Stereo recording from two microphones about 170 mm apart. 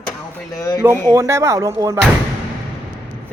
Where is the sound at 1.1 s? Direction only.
15° right (ahead or behind).